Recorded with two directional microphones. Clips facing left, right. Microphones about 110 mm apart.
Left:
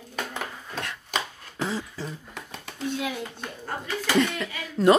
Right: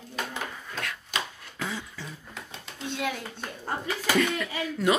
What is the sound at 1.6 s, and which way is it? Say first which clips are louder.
Beatboxing: left 5 dB; 35° left (ahead or behind).